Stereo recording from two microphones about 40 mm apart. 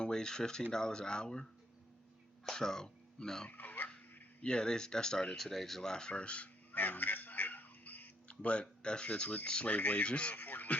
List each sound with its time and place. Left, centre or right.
0.0 s speech: centre
3.5 s a sound: left
4.4 s speech: left
5.4 s speech: centre
5.9 s speech: centre
6.7 s a sound: left
8.3 s speech: left
9.6 s speech: left
10.1 s speech: left
10.3 s radio: left